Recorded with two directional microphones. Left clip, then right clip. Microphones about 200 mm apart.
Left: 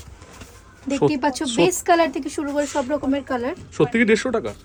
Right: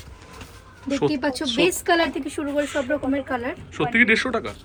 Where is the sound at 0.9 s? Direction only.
15° left (ahead or behind).